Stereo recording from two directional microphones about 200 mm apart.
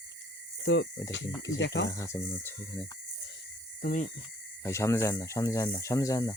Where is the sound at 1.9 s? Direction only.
15° left (ahead or behind).